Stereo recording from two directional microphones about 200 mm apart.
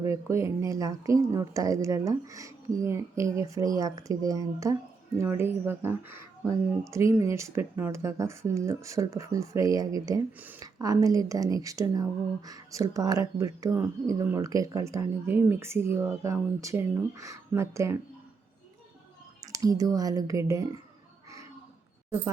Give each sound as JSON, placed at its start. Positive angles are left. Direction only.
{"t": 0.0, "sound": "speech", "side_deg": -15}
{"t": 19.4, "sound": "speech", "side_deg": -20}